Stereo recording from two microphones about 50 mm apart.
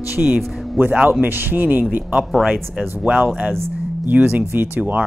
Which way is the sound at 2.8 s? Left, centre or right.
Right.